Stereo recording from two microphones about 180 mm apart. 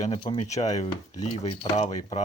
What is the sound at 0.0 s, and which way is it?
Speech, 30° left (ahead or behind).